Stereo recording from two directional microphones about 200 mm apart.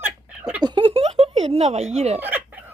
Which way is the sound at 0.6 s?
25° right (ahead or behind).